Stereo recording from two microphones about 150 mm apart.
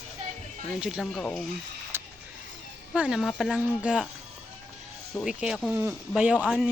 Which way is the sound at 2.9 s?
10° right (ahead or behind).